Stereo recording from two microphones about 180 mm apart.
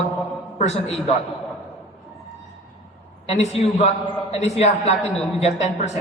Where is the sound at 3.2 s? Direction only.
35° left (ahead or behind).